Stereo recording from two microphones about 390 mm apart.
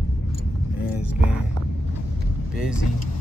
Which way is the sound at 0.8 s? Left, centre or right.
Centre.